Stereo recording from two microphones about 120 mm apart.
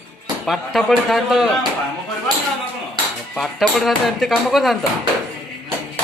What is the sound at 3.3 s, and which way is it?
Speech, centre (ahead or behind).